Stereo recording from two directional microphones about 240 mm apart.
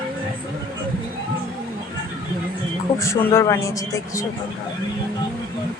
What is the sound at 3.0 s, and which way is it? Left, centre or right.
Speech, centre.